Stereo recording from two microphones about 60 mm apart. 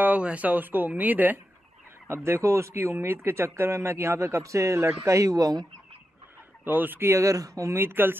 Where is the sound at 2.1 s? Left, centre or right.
Right.